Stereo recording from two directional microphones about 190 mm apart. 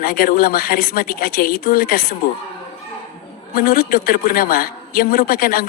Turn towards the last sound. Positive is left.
turn(degrees=50)  # may be behind; listen again after turning